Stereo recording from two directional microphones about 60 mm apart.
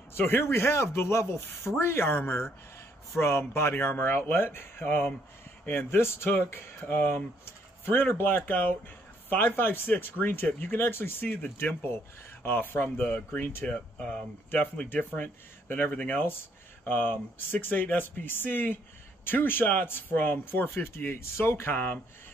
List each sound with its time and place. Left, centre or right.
0.4 s a man's voice: left
13.7 s speech: centre; by 22.0 s left